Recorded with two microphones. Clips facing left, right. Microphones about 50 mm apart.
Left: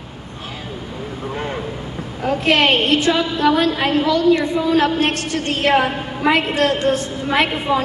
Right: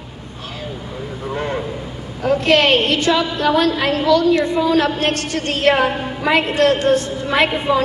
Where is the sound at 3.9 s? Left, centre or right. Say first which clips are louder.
Right 1 dB; left.